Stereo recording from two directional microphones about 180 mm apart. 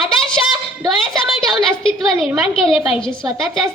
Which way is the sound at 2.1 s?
5° right (ahead or behind).